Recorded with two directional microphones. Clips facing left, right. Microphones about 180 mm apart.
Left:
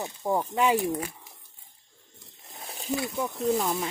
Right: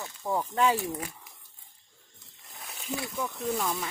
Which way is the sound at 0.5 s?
15° left (ahead or behind).